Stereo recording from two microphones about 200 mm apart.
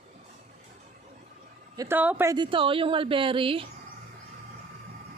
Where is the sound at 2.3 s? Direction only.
25° right (ahead or behind).